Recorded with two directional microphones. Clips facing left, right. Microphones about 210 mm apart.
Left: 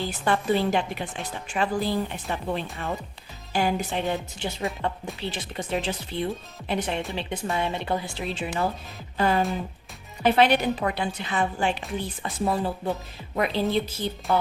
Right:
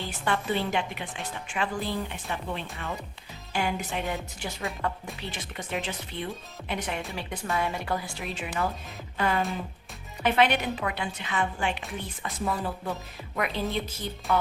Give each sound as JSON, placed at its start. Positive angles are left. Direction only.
{"t": 0.0, "sound": "a woman's voice", "side_deg": 35}